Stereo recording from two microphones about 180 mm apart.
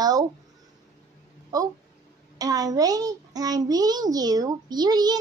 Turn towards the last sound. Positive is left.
turn(degrees=-20)  # may be behind; listen again after turning